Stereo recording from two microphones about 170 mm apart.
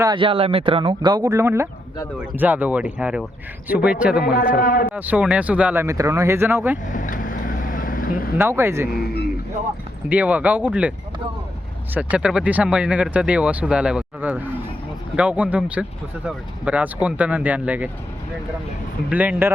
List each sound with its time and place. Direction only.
0.0 s speech: 30° right (ahead or behind); by 4.2 s 5° right (ahead or behind)
4.2 s a man's voice: 60° left (ahead or behind)
4.9 s speech: 10° right (ahead or behind)
6.8 s vehicle: 50° left (ahead or behind)
8.4 s speech: 15° right (ahead or behind)
8.9 s speech: 65° left (ahead or behind)
10.1 s speech: 10° right (ahead or behind)
11.9 s speech: 10° right (ahead or behind)
19.1 s speech: 10° right (ahead or behind)